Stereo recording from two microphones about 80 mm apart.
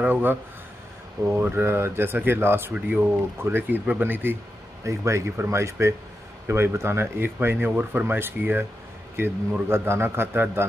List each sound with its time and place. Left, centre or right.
0.0 s speech: right
4.8 s speech: right